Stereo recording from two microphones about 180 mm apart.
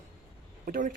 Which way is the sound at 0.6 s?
50° right (ahead or behind).